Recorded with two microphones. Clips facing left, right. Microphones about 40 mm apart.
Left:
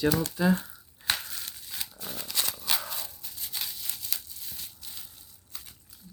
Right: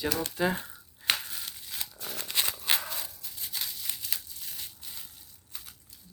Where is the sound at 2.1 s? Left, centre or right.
Right.